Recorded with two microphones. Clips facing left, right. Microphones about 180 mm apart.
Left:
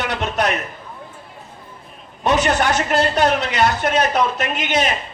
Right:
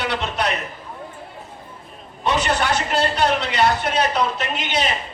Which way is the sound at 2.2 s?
45° left (ahead or behind).